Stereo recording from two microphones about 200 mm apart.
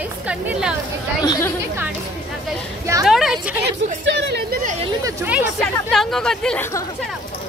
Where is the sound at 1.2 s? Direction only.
15° left (ahead or behind).